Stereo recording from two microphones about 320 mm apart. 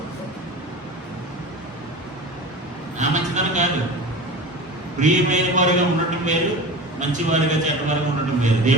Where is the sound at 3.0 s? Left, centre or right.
Right.